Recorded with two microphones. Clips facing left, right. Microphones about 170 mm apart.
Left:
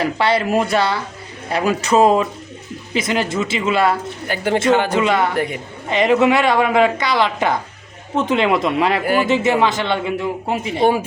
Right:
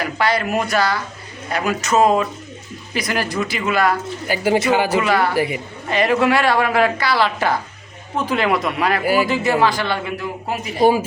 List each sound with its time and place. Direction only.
0.0 s a man's voice: 30° left (ahead or behind)
4.3 s speech: 5° right (ahead or behind)
4.9 s a man's voice: 20° left (ahead or behind)
5.3 s a woman's voice: 5° right (ahead or behind)
5.9 s a man's voice: 20° left (ahead or behind)